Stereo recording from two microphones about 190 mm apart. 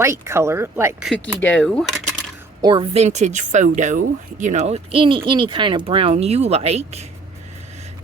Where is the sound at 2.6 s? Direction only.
25° right (ahead or behind).